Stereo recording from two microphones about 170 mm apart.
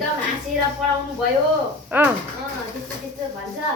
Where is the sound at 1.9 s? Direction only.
10° right (ahead or behind).